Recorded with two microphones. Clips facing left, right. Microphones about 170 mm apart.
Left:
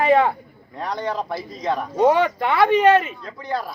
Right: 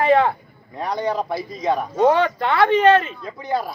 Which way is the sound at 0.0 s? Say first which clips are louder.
Even; 10° left (ahead or behind).